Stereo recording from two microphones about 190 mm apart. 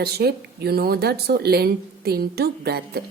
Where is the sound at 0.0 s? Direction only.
55° right (ahead or behind).